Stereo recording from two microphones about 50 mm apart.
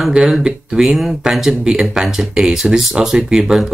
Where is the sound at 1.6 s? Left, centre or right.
Centre.